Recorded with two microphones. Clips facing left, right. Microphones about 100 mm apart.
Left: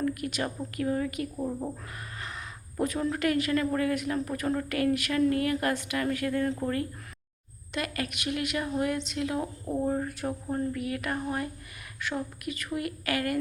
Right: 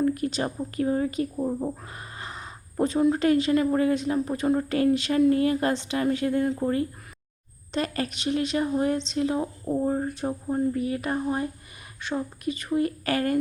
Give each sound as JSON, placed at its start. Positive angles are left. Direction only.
{"t": 0.0, "sound": "a woman's voice", "side_deg": -30}